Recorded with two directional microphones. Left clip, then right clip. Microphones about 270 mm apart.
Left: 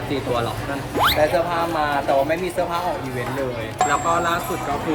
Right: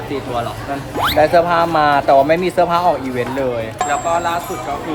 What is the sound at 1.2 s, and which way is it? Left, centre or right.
Speech, right.